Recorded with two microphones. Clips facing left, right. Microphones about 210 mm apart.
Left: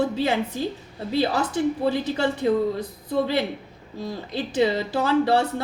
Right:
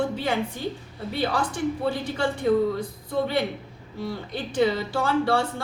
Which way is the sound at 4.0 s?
20° left (ahead or behind).